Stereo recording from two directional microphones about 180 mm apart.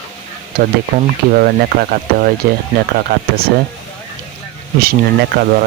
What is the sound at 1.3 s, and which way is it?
Speech, 55° right (ahead or behind).